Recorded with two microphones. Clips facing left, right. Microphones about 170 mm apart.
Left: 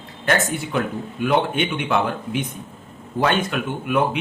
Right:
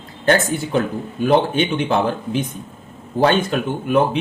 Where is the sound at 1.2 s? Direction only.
35° right (ahead or behind).